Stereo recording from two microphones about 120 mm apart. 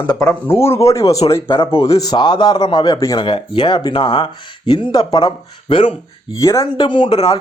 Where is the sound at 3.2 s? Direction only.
40° left (ahead or behind).